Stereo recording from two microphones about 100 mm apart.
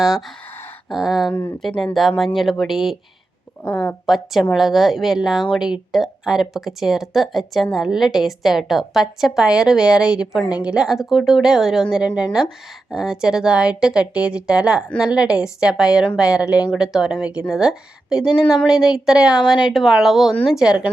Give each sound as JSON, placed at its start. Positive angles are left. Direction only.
{"t": 0.9, "sound": "a woman's voice", "side_deg": -5}
{"t": 1.3, "sound": "speech", "side_deg": 20}
{"t": 1.6, "sound": "a woman's voice", "side_deg": 0}
{"t": 3.6, "sound": "speech", "side_deg": 15}
{"t": 4.0, "sound": "a woman's voice", "side_deg": 0}